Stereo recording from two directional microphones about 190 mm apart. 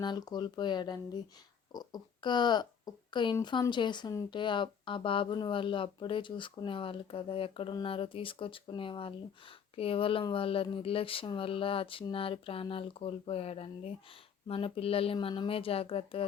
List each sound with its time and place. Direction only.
0.0 s speech: 20° left (ahead or behind)